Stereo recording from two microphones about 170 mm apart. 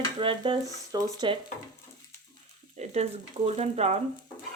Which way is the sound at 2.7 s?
40° right (ahead or behind).